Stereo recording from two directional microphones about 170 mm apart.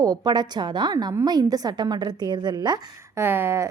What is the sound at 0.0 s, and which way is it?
A woman's voice, 25° right (ahead or behind).